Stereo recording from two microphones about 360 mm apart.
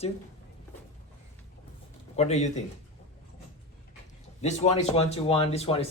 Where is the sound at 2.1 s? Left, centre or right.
Centre.